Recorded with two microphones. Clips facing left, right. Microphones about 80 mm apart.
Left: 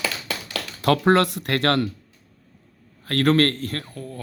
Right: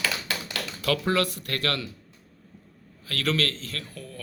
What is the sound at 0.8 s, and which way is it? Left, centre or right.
Speech, left.